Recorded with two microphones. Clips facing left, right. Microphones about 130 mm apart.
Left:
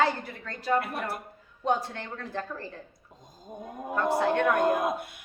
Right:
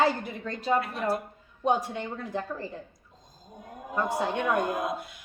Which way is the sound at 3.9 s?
15° right (ahead or behind).